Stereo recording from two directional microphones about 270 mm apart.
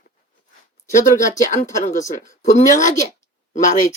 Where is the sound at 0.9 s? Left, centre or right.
Left.